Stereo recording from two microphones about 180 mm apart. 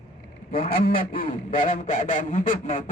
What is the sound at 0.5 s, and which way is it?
Speech, 30° left (ahead or behind).